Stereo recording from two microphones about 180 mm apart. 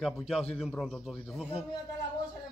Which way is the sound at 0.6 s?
Centre (ahead or behind).